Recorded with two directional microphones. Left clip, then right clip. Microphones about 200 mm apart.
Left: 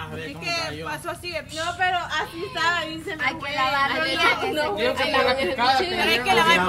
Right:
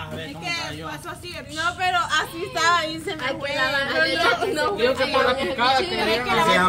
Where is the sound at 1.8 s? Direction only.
70° right (ahead or behind).